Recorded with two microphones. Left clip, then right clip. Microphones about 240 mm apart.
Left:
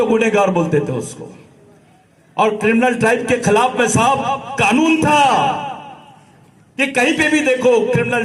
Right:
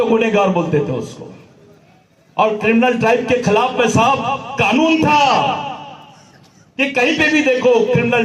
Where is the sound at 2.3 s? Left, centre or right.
Left.